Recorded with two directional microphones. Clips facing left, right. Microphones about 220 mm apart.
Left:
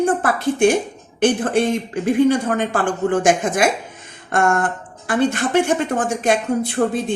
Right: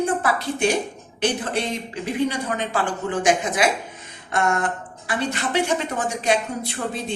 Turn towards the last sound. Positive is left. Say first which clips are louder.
# left 9 dB
turn(degrees=50)  # may be behind; listen again after turning